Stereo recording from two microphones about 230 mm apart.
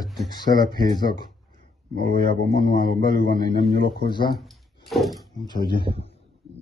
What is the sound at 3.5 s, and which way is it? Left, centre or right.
Speech, left.